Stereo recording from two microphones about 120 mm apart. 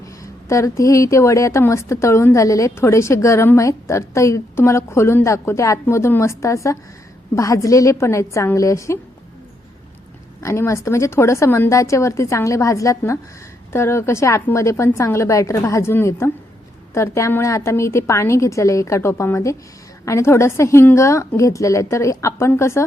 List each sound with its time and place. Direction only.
0.0 s speech: 25° left (ahead or behind)
10.4 s speech: 25° left (ahead or behind)